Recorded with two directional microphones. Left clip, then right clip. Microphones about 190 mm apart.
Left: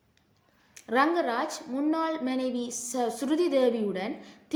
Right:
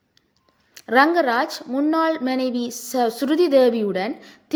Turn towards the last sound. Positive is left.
turn(degrees=-40)  # may be behind; listen again after turning